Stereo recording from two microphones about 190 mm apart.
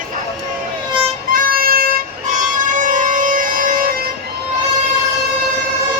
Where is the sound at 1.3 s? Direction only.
50° right (ahead or behind).